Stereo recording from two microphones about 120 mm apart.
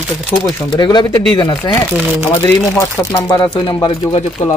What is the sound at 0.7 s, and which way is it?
Speech, 35° left (ahead or behind).